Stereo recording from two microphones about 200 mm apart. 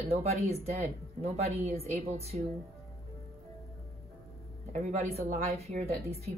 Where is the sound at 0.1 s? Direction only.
30° right (ahead or behind).